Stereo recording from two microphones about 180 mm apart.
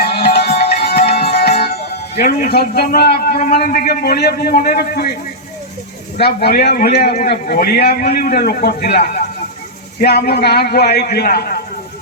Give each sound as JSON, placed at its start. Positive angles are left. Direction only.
{"t": 0.0, "sound": "music", "side_deg": 60}
{"t": 1.1, "sound": "music", "side_deg": 35}
{"t": 2.1, "sound": "a man's voice", "side_deg": 50}
{"t": 6.1, "sound": "a man's voice", "side_deg": 65}